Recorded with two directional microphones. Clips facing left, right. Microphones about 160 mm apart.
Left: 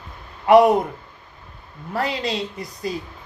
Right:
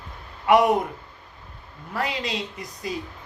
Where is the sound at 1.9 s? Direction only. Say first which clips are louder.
Left 4 dB; 35° left (ahead or behind).